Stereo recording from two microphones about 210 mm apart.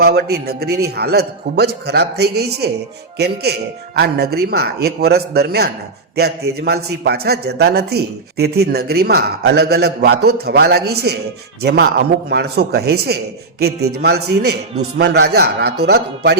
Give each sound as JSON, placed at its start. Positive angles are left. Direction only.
{"t": 0.0, "sound": "a man's voice", "side_deg": -50}